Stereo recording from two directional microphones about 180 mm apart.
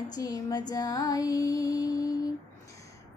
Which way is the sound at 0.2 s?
20° left (ahead or behind).